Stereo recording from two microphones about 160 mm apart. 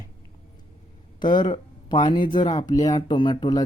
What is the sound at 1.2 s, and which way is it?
Speech, 30° left (ahead or behind).